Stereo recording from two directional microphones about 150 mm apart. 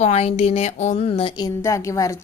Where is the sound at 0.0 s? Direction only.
45° left (ahead or behind).